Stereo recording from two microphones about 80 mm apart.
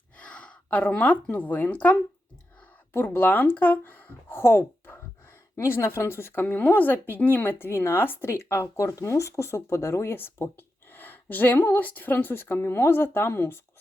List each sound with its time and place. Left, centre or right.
0.2 s a woman's voice: centre; by 13.6 s left